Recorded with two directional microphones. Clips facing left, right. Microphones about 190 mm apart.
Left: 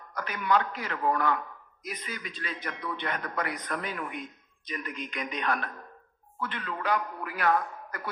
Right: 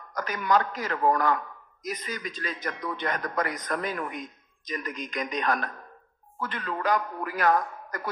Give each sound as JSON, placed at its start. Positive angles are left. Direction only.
{"t": 0.1, "sound": "a man's voice", "side_deg": -40}